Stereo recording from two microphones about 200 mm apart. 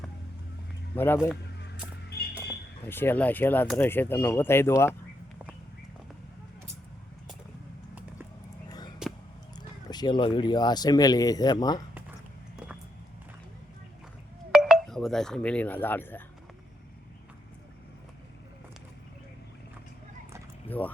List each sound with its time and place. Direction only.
0.9 s speech: 10° left (ahead or behind)
1.2 s a sound: 5° right (ahead or behind)
2.8 s speech: 10° left (ahead or behind)
9.0 s a sound: 5° right (ahead or behind)
9.9 s speech: 20° left (ahead or behind)
14.5 s speech: centre (ahead or behind)
20.7 s speech: 10° left (ahead or behind)